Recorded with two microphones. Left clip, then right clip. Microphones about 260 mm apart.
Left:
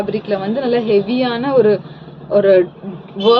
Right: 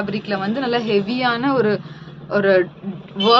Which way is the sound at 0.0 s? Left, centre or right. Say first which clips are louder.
Left 4 dB; right.